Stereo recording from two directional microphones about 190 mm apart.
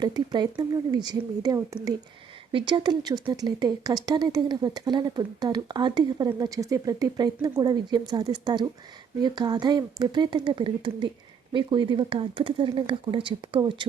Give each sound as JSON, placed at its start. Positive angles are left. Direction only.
{"t": 0.0, "sound": "speech", "side_deg": -20}